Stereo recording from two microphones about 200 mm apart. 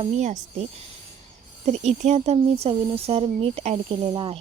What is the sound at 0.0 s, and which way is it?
Speech, 35° right (ahead or behind).